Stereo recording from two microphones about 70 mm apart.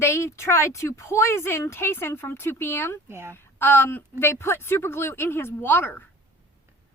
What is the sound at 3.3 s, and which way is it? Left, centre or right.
A woman's voice, left.